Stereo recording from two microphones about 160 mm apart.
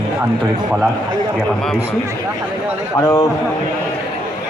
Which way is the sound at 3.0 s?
15° left (ahead or behind).